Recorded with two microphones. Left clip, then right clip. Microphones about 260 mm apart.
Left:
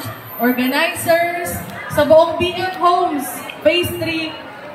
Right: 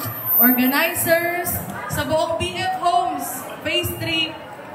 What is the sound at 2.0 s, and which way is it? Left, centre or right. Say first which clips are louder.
A woman's voice: left 10 dB; centre.